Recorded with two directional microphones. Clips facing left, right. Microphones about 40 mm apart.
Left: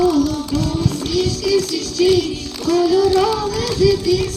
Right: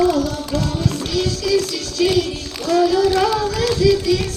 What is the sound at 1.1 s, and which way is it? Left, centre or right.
Music, right.